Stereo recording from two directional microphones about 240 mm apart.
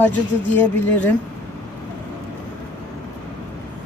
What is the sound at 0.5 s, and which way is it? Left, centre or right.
Speech, centre.